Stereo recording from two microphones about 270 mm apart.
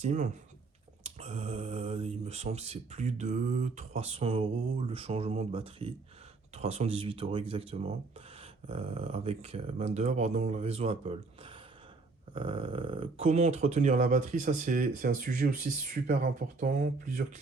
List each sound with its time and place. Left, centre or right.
0.0 s speech: right